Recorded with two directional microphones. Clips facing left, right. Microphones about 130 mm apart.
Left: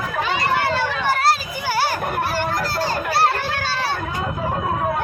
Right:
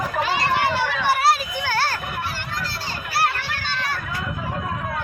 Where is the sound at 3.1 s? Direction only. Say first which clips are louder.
Left 1 dB; 25° left (ahead or behind).